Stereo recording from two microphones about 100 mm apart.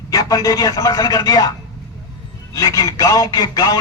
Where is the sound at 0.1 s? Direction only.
40° left (ahead or behind).